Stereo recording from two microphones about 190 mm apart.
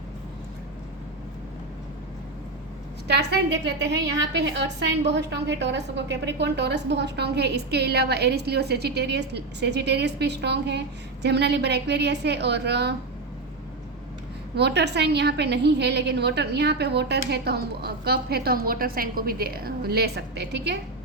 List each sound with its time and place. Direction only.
3.1 s a woman's voice: 60° right (ahead or behind)
14.5 s a woman's voice: 60° right (ahead or behind)